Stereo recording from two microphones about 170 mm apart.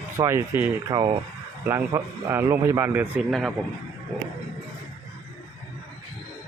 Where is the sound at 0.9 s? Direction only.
25° right (ahead or behind).